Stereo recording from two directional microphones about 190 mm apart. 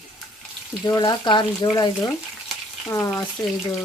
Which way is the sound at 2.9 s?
20° left (ahead or behind).